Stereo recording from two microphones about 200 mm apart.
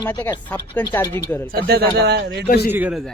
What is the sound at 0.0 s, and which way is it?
Speech, 15° left (ahead or behind).